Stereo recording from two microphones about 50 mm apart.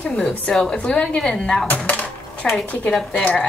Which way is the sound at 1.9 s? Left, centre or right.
Left.